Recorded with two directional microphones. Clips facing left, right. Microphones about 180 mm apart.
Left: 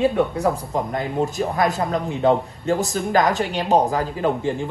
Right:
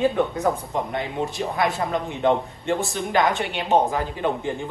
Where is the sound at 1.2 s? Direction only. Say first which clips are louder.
Left 4 dB; 40° left (ahead or behind).